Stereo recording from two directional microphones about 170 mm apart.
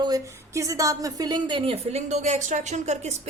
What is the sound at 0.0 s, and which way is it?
A woman's voice, 20° right (ahead or behind).